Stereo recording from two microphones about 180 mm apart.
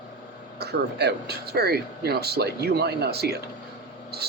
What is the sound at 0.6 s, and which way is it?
Speech, 65° right (ahead or behind).